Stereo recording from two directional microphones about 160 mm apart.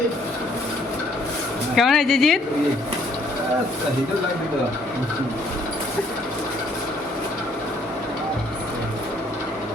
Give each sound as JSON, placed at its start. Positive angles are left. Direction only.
{"t": 1.7, "sound": "speech", "side_deg": 0}